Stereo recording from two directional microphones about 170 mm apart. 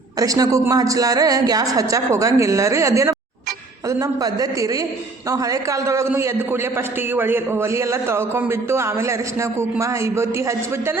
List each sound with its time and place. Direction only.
0.2 s a man's voice: 20° right (ahead or behind)